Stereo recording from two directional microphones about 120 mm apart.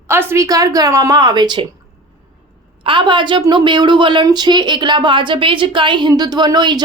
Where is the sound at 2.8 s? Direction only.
45° right (ahead or behind).